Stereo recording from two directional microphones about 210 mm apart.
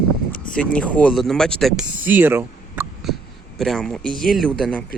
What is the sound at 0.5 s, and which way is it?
Speech, 5° left (ahead or behind).